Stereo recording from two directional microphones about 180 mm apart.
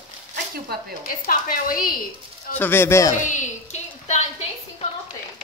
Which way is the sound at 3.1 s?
40° left (ahead or behind).